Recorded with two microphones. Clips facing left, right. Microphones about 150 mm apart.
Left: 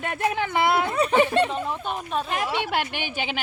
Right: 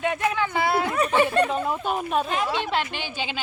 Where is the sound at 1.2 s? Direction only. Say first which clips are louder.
Even; 20° left (ahead or behind).